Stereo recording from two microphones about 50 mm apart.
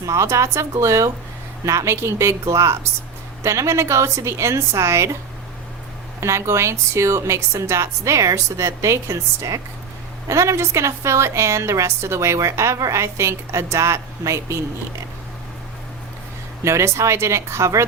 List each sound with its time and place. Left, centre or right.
0.0 s a woman's voice: right
6.1 s a woman's voice: right
16.6 s a woman's voice: right